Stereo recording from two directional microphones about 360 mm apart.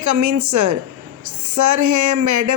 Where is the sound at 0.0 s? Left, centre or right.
Right.